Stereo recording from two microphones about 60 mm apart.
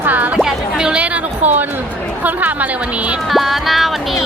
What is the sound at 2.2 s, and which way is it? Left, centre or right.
Speech, right.